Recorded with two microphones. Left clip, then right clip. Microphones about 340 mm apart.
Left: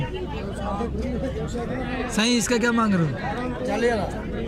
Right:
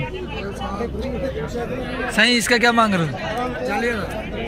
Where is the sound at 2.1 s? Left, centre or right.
Centre.